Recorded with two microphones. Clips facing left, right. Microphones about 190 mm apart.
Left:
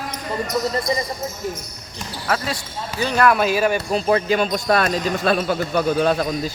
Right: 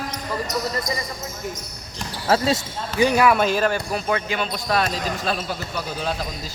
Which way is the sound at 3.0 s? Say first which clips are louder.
Right 1 dB; 10° right (ahead or behind).